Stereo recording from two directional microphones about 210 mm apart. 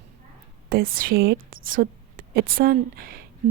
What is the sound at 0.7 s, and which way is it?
A woman's voice, 45° right (ahead or behind).